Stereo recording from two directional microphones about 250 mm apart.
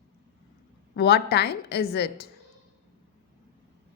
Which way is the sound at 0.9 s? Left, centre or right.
Left.